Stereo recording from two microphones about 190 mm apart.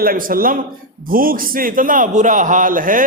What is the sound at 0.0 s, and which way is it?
A man's voice, 50° right (ahead or behind).